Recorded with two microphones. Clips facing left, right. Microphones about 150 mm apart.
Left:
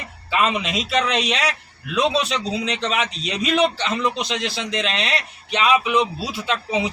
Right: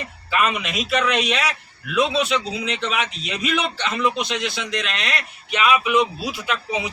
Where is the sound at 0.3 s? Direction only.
25° left (ahead or behind).